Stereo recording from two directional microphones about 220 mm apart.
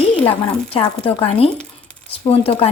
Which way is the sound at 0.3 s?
25° left (ahead or behind).